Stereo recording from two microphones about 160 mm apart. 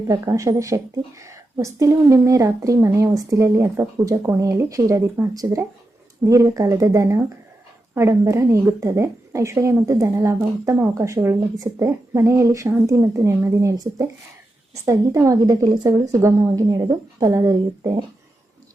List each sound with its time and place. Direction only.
0.1 s a woman's voice: 20° right (ahead or behind)